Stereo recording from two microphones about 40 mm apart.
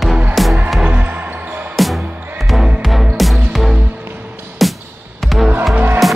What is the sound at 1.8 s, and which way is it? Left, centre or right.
Music, centre.